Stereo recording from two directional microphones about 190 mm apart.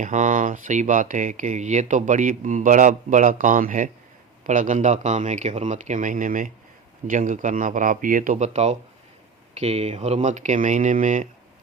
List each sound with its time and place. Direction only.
0.0 s speech: 40° right (ahead or behind)